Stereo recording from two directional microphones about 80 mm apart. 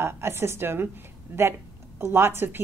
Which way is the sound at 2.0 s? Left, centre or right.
Right.